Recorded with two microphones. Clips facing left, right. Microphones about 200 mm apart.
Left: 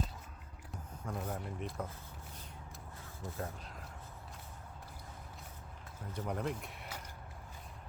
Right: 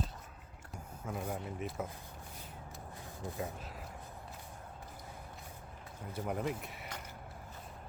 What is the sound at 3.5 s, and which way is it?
Speech, 5° right (ahead or behind).